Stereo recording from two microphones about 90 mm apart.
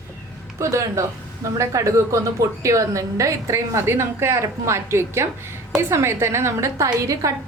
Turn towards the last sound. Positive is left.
turn(degrees=-40)  # may be behind; listen again after turning